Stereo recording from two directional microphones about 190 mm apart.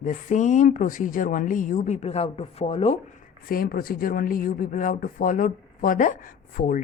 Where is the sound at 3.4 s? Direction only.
50° left (ahead or behind).